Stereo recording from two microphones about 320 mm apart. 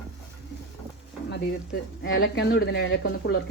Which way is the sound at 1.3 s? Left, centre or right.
Left.